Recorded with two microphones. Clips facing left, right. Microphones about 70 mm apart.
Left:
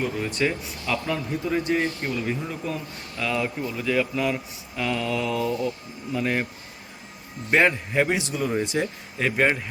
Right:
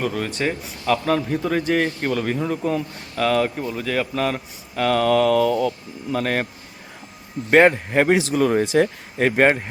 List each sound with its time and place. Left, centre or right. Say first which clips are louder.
0.0 s speech: right 2 dB; right
7.5 s speech: right 6 dB; right